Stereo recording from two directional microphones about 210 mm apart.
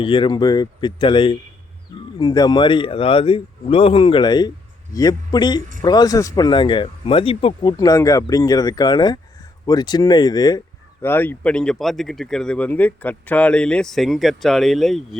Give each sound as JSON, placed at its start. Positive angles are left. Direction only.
{"t": 0.0, "sound": "speech", "side_deg": 25}